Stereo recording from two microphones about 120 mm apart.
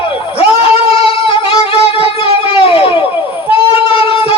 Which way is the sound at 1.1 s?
50° left (ahead or behind).